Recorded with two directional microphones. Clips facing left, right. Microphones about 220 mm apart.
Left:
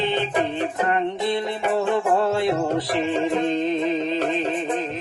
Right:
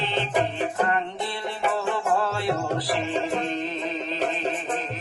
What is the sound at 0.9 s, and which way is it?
Music, 20° left (ahead or behind).